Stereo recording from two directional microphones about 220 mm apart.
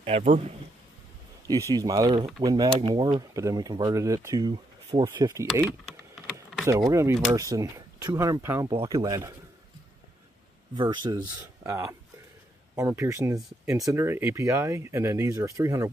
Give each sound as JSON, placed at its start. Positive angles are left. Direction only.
{"t": 0.0, "sound": "a man's voice", "side_deg": -30}
{"t": 1.5, "sound": "speech", "side_deg": -15}
{"t": 6.9, "sound": "speech", "side_deg": -15}
{"t": 10.7, "sound": "speech", "side_deg": -20}